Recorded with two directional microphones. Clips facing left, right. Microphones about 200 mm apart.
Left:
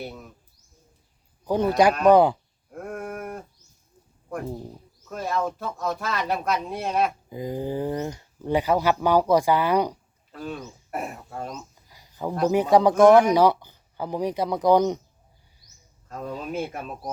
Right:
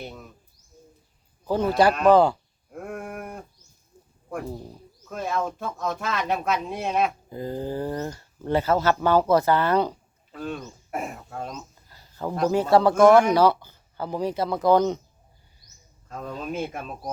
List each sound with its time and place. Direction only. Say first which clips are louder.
0.0 s speech: left 2 dB; 5° left (ahead or behind)
1.5 s speech: left 1 dB; 15° left (ahead or behind)
1.9 s speech: left 1 dB; 5° right (ahead or behind)
2.1 s speech: left 1 dB; 15° left (ahead or behind)
2.7 s a sound: left 1 dB; centre (ahead or behind)
5.0 s speech: left 1 dB; centre (ahead or behind)
7.3 s speech: left 1 dB; 15° left (ahead or behind)
10.3 s speech: right 1 dB; centre (ahead or behind)
16.0 s speech: even; 10° left (ahead or behind)